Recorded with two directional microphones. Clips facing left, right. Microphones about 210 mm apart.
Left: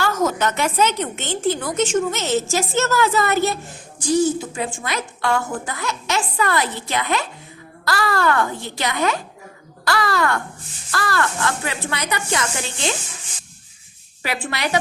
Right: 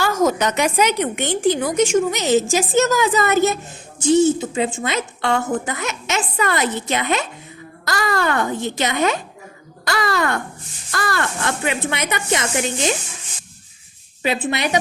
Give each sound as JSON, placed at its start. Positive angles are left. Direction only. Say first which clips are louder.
{"t": 0.0, "sound": "a woman's voice", "louder": "right 2 dB", "side_deg": -10}
{"t": 14.2, "sound": "a woman's voice", "louder": "right 5 dB", "side_deg": -20}